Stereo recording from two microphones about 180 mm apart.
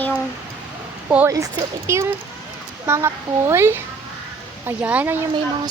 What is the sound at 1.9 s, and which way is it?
Speech, 15° right (ahead or behind).